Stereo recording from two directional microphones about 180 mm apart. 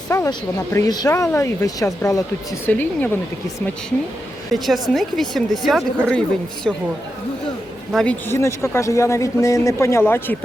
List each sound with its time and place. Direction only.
0.1 s speech: 20° left (ahead or behind)
4.5 s speech: centre (ahead or behind)
7.9 s speech: 10° left (ahead or behind)